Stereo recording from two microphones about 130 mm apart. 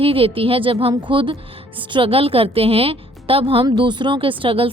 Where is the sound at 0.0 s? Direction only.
45° right (ahead or behind).